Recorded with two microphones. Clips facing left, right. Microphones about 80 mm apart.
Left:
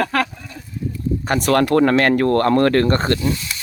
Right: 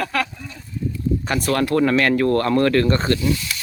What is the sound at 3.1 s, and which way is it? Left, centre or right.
Speech, left.